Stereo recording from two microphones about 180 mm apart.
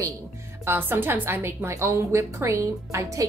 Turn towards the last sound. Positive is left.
turn(degrees=-15)  # may be behind; listen again after turning